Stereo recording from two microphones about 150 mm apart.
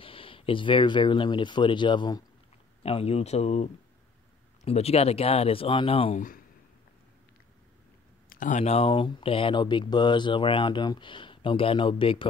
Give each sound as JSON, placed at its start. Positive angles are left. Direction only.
{"t": 0.0, "sound": "speech", "side_deg": 35}
{"t": 2.8, "sound": "speech", "side_deg": 45}
{"t": 6.1, "sound": "speech", "side_deg": 65}
{"t": 8.3, "sound": "speech", "side_deg": 60}